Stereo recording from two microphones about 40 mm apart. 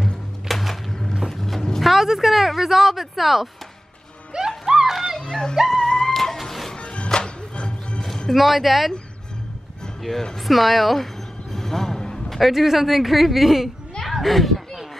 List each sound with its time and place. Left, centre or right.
0.5 s a sound: centre
1.8 s speech: centre
4.3 s music: centre
4.9 s music: centre
5.2 s music: centre
6.3 s music: centre
6.7 s music: left
8.3 s speech: centre
10.1 s speech: left
10.4 s speech: centre
11.5 s vehicle: centre
12.4 s speech: centre
14.0 s a sound: centre